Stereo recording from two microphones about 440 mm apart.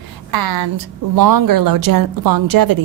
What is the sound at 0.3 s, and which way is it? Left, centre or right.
A woman's voice, right.